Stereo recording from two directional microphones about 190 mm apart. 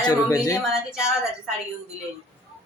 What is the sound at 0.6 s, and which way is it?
Speech, 5° right (ahead or behind).